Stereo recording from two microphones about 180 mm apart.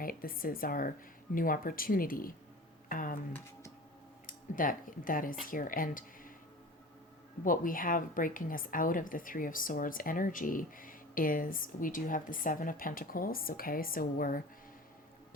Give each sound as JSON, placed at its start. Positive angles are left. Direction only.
{"t": 0.0, "sound": "a woman's voice", "side_deg": 50}
{"t": 4.3, "sound": "speech", "side_deg": 50}
{"t": 7.4, "sound": "a woman's voice", "side_deg": 50}